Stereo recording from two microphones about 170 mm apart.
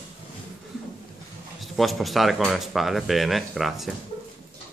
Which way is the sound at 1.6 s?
Centre (ahead or behind).